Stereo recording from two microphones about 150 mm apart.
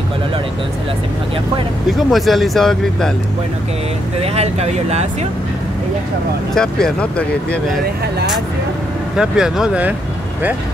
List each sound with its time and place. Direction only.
1.9 s speech: centre (ahead or behind)
4.2 s speech: 45° right (ahead or behind)
6.5 s speech: 5° left (ahead or behind)
9.1 s speech: 5° right (ahead or behind)